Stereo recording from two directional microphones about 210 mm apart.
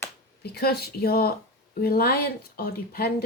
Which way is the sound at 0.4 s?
50° left (ahead or behind).